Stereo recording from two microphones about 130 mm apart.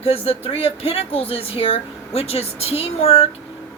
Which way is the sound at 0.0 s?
50° left (ahead or behind).